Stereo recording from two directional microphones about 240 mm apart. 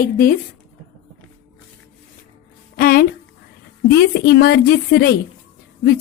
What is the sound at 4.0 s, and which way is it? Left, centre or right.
A woman's voice, left.